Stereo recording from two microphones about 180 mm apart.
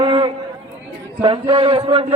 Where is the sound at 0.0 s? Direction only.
25° right (ahead or behind).